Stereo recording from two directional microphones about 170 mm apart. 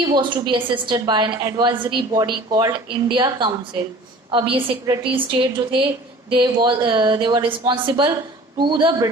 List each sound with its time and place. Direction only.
0.0 s speech: 25° right (ahead or behind)